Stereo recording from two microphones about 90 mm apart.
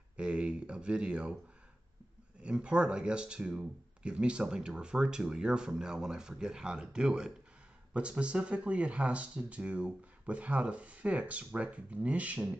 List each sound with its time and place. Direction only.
0.2 s speech: 10° right (ahead or behind)
2.4 s speech: 10° right (ahead or behind)